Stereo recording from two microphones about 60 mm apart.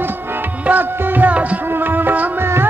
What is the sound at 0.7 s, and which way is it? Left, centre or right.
Music, right.